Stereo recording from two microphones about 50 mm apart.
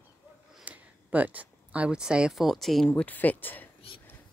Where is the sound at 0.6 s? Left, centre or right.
Right.